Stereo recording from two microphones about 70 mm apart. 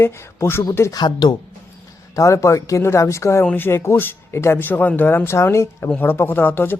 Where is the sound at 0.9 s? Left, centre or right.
Left.